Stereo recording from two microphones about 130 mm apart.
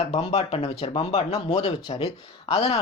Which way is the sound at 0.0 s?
55° left (ahead or behind).